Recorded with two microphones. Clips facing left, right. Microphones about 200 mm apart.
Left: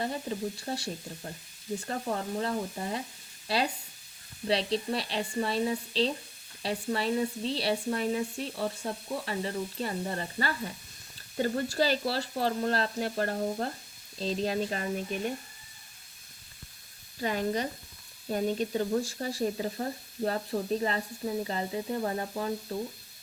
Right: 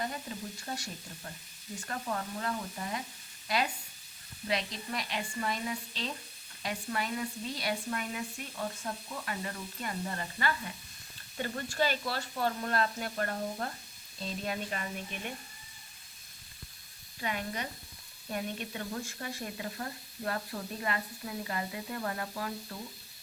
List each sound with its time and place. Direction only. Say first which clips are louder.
0.6 s speech: left 6 dB; 30° left (ahead or behind)
17.2 s speech: left 7 dB; 40° left (ahead or behind)